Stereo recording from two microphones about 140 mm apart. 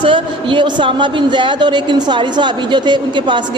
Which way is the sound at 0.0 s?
35° right (ahead or behind).